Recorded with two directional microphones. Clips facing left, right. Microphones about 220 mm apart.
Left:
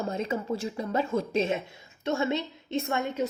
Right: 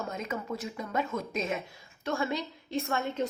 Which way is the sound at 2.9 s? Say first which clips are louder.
Left 2 dB; 15° left (ahead or behind).